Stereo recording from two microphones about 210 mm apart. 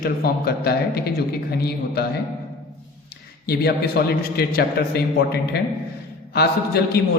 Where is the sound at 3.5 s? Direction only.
50° left (ahead or behind).